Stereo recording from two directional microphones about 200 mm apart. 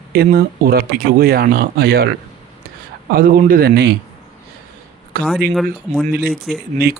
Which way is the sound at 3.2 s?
45° right (ahead or behind).